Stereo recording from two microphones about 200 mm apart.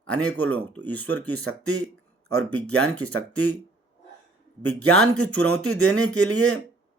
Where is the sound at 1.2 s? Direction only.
90° right.